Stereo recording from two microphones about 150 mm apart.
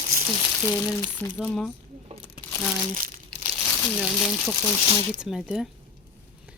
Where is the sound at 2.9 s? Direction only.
60° right (ahead or behind).